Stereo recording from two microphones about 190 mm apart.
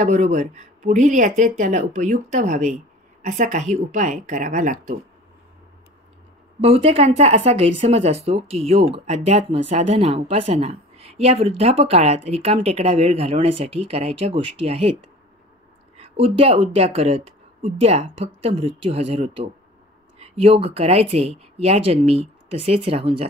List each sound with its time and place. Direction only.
0.0 s speech: 40° right (ahead or behind)
6.6 s speech: 30° right (ahead or behind)
16.2 s speech: 30° right (ahead or behind)